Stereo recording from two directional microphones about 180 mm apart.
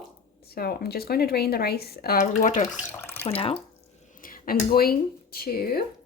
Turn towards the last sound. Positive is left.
turn(degrees=55)  # may be behind; listen again after turning